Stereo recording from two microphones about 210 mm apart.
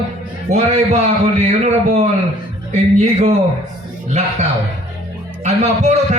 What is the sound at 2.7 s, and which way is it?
Speech, 30° right (ahead or behind).